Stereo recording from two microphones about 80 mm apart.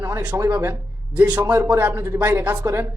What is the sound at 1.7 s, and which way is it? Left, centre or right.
Speech, centre.